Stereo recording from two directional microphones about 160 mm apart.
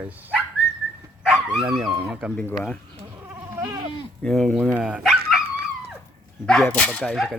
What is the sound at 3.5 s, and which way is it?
Goat, 15° right (ahead or behind).